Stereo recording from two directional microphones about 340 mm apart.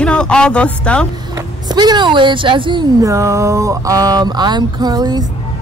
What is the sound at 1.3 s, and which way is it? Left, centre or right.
Speech, centre.